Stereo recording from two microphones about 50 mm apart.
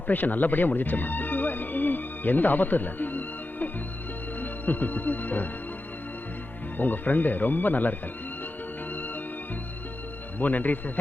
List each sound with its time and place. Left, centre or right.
0.1 s speech: left
4.4 s music: left
6.7 s speech: left
10.4 s speech: left